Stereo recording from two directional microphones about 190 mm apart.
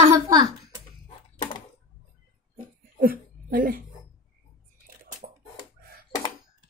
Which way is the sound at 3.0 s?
45° right (ahead or behind).